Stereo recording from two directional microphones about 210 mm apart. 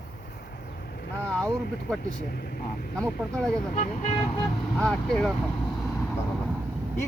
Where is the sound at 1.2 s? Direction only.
5° left (ahead or behind).